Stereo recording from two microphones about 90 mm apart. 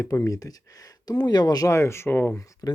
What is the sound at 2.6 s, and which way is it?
Speech, 40° left (ahead or behind).